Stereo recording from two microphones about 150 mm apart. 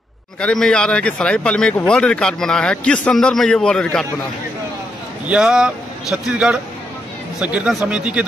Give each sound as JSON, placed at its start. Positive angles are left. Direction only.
{"t": 0.4, "sound": "speech", "side_deg": 5}
{"t": 5.2, "sound": "a man's voice", "side_deg": -5}